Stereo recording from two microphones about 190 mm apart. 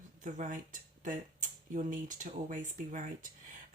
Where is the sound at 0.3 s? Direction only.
45° right (ahead or behind).